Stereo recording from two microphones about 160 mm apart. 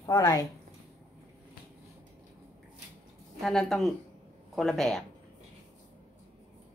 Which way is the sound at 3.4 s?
Centre (ahead or behind).